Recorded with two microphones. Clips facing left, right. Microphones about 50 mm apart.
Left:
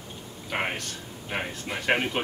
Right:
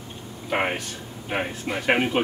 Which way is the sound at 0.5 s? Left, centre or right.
Centre.